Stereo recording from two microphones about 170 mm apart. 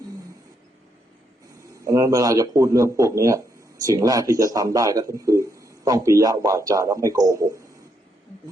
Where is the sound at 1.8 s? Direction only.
20° right (ahead or behind).